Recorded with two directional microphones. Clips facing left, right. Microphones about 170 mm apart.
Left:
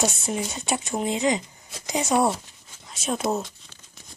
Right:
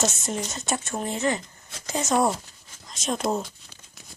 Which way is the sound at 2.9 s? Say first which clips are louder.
Left 1 dB; 5° left (ahead or behind).